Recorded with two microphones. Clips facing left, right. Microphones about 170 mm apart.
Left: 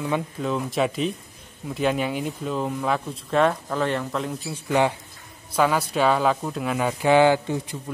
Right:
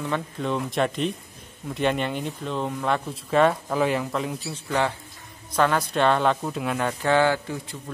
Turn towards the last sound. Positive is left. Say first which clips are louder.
# left 4 dB
turn(degrees=20)  # may be behind; listen again after turning